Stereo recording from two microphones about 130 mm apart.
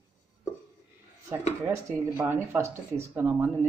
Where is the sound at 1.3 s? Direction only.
20° right (ahead or behind).